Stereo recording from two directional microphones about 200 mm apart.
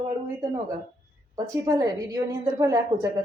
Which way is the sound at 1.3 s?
20° right (ahead or behind).